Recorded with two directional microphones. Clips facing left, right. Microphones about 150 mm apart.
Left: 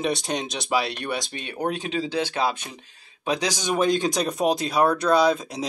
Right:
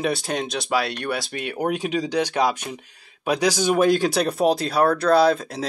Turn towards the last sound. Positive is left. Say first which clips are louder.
# right 2 dB
turn(degrees=0)  # may be behind; listen again after turning